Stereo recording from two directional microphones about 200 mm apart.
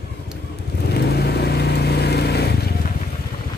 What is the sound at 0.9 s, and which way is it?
Vehicle, 55° left (ahead or behind).